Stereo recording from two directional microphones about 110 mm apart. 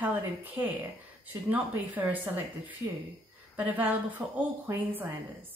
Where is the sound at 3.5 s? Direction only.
15° right (ahead or behind).